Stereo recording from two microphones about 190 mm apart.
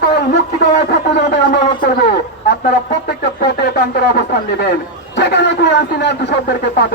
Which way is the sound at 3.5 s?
60° left (ahead or behind).